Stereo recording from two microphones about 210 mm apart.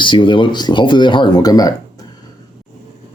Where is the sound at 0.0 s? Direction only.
25° left (ahead or behind).